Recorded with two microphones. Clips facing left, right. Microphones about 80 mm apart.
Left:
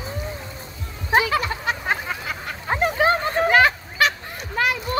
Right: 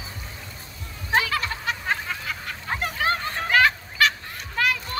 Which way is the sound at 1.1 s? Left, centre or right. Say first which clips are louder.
Left 4 dB; centre.